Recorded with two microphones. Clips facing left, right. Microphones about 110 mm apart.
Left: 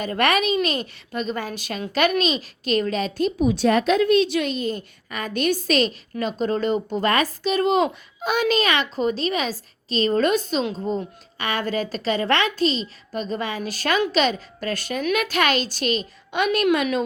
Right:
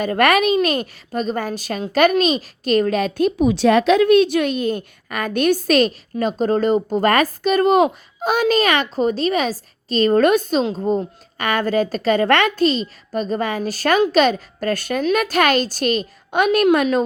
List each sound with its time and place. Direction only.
0.0 s a child's voice: 50° right (ahead or behind)